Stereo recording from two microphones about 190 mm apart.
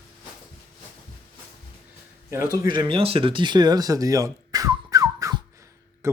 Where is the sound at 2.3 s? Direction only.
15° right (ahead or behind).